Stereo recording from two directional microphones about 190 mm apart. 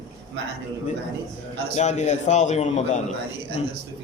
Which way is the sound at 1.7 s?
35° left (ahead or behind).